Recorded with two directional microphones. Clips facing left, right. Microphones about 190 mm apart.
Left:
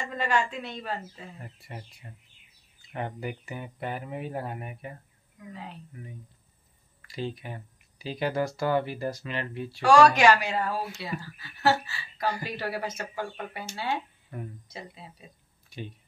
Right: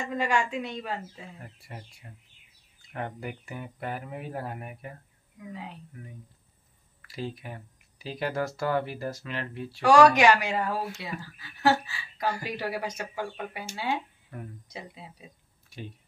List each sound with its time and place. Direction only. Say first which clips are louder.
0.1 s speech: even; 10° right (ahead or behind)
1.4 s speech: left 1 dB; centre (ahead or behind)
2.9 s speech: left 2 dB; centre (ahead or behind)
6.0 s speech: left 1 dB; centre (ahead or behind)
9.8 s speech: even; 15° right (ahead or behind)